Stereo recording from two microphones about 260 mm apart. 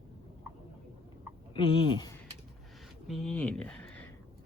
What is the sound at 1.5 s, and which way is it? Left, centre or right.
Speech, centre.